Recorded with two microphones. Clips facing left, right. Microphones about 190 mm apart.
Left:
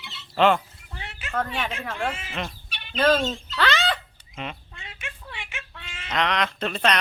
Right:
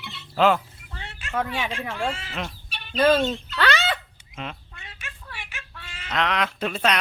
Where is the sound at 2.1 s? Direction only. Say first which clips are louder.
Right 2 dB; 20° left (ahead or behind).